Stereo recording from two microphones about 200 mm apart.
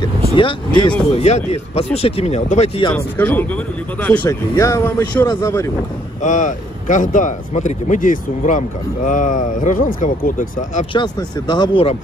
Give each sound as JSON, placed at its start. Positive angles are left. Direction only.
{"t": 0.3, "sound": "speech", "side_deg": 25}
{"t": 2.9, "sound": "speech", "side_deg": 10}
{"t": 6.2, "sound": "speech", "side_deg": 40}
{"t": 10.9, "sound": "speech", "side_deg": 20}